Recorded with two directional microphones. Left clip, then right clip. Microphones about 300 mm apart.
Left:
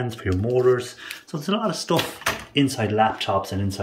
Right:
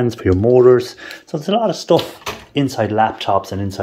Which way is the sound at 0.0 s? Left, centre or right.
Centre.